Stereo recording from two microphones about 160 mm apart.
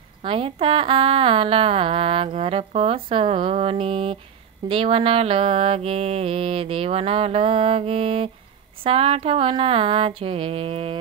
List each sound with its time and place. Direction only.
0.2 s speech: 35° right (ahead or behind)